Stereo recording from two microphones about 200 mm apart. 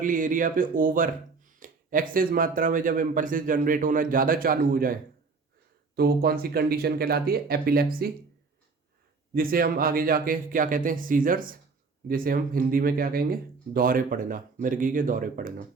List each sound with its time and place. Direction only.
0.0 s speech: 40° right (ahead or behind)
6.0 s speech: 50° right (ahead or behind)
9.3 s speech: 45° right (ahead or behind)